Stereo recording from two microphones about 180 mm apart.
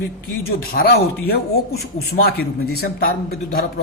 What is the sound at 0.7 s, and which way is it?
Speech, 55° left (ahead or behind).